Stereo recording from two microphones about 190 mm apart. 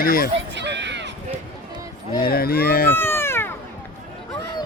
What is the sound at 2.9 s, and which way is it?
Cat, 10° left (ahead or behind).